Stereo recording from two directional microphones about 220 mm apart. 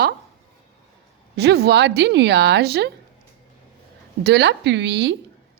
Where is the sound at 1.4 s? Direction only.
50° right (ahead or behind).